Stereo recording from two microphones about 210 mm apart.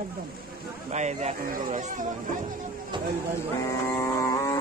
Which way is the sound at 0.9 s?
35° right (ahead or behind).